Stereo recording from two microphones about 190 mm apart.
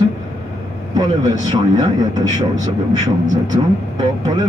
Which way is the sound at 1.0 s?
20° right (ahead or behind).